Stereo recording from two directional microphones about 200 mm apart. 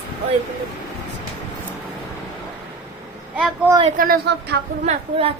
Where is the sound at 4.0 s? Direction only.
50° right (ahead or behind).